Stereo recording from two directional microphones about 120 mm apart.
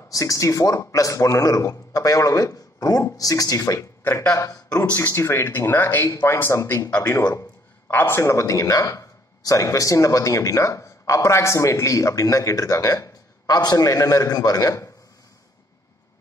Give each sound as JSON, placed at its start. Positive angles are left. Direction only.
{"t": 0.1, "sound": "a man's voice", "side_deg": 25}
{"t": 4.8, "sound": "a man's voice", "side_deg": 15}
{"t": 7.9, "sound": "a man's voice", "side_deg": 20}